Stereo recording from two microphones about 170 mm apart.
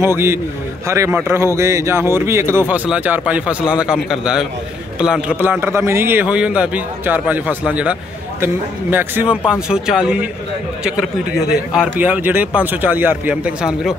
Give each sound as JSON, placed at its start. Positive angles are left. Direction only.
{"t": 0.0, "sound": "a man's voice", "side_deg": -15}